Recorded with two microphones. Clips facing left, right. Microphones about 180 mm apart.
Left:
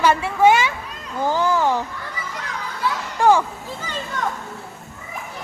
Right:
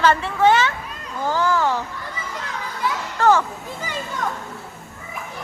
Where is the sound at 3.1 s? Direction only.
15° left (ahead or behind).